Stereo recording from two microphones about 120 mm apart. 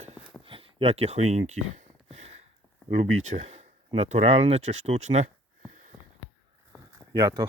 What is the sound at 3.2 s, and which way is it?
Speech, 65° right (ahead or behind).